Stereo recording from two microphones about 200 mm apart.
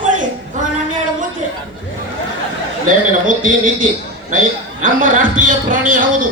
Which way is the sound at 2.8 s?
40° right (ahead or behind).